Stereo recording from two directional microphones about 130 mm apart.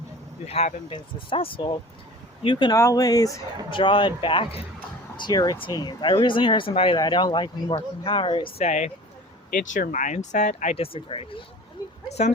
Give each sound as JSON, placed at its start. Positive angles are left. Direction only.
{"t": 0.4, "sound": "speech", "side_deg": 50}
{"t": 2.7, "sound": "speech", "side_deg": 25}
{"t": 3.7, "sound": "speech", "side_deg": 40}
{"t": 7.0, "sound": "speech", "side_deg": 35}
{"t": 9.5, "sound": "speech", "side_deg": 85}
{"t": 12.0, "sound": "speech", "side_deg": 55}